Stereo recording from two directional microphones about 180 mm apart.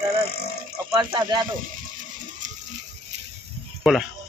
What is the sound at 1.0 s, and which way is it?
Speech, 25° right (ahead or behind).